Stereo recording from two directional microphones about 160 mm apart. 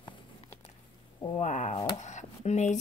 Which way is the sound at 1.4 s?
50° left (ahead or behind).